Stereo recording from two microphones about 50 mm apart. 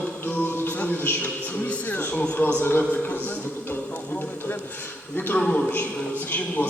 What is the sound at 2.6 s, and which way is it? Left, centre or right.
Speech, left.